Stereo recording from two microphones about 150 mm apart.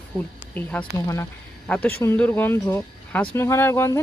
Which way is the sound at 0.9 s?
20° left (ahead or behind).